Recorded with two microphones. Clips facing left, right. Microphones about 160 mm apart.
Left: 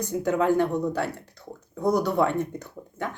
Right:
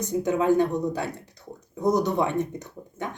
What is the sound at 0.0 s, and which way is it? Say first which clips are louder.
Speech: even; 20° right (ahead or behind).